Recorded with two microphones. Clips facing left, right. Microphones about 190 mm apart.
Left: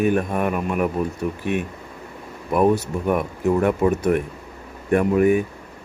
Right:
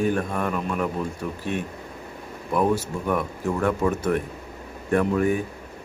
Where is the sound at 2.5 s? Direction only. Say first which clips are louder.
Left 4 dB; 20° left (ahead or behind).